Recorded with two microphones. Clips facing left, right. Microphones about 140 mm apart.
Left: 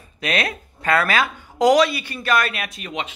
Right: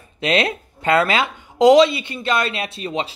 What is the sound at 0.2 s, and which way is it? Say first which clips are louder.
Speech: right 5 dB; 25° right (ahead or behind).